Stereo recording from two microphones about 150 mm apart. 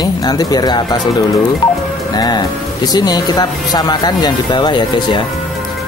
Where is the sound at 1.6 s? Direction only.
30° left (ahead or behind).